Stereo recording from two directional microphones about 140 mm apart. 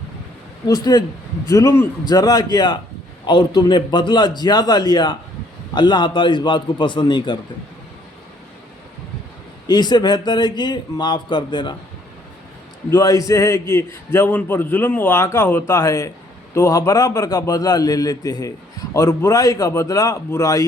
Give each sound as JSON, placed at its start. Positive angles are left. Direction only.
{"t": 0.7, "sound": "a man's voice", "side_deg": 30}
{"t": 9.6, "sound": "a man's voice", "side_deg": 30}
{"t": 12.9, "sound": "a man's voice", "side_deg": 25}